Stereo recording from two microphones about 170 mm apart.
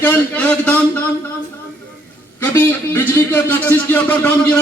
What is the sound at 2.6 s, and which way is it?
A man's voice, 10° left (ahead or behind).